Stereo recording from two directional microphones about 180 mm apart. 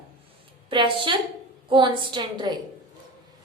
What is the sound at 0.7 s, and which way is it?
A woman's voice, 25° right (ahead or behind).